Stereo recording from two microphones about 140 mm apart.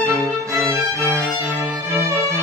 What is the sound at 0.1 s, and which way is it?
Music, 20° right (ahead or behind).